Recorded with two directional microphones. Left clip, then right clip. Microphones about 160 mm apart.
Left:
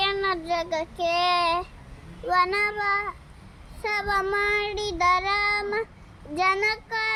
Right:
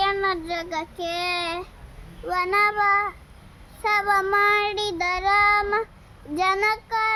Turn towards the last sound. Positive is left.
turn(degrees=-20)  # may be behind; listen again after turning